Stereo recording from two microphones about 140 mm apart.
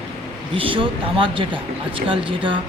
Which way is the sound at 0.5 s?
40° right (ahead or behind).